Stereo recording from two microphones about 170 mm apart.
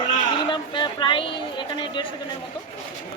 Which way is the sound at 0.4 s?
30° left (ahead or behind).